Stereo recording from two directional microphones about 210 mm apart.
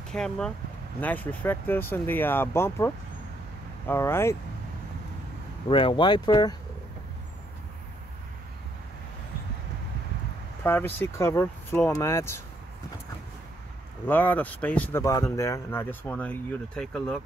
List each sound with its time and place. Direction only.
0.1 s speech: 5° left (ahead or behind)
5.7 s speech: 25° left (ahead or behind)
10.6 s speech: 10° left (ahead or behind)
14.0 s speech: 10° left (ahead or behind)